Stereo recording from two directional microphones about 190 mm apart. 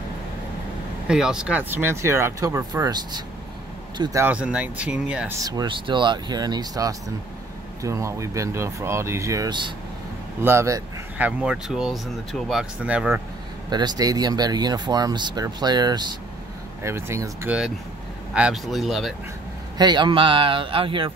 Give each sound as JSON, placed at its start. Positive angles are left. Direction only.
{"t": 1.0, "sound": "speech", "side_deg": -5}
{"t": 5.4, "sound": "speech", "side_deg": -20}
{"t": 13.7, "sound": "speech", "side_deg": -20}
{"t": 18.3, "sound": "speech", "side_deg": -5}
{"t": 19.8, "sound": "speech", "side_deg": -25}